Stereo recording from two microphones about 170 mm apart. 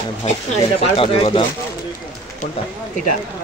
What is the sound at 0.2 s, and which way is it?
Speech, 40° left (ahead or behind).